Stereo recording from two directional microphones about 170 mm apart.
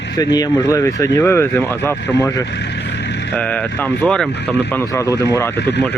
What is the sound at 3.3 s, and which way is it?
Speech, 5° left (ahead or behind).